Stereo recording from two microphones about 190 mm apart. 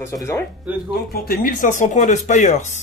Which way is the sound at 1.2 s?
50° left (ahead or behind).